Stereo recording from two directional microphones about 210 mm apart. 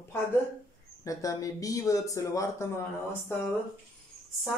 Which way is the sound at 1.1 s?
15° left (ahead or behind).